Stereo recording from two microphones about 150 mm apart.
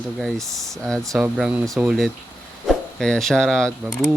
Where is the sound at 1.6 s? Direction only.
20° right (ahead or behind).